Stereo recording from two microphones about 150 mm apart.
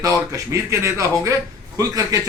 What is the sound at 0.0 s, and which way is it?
A man's voice, 20° right (ahead or behind).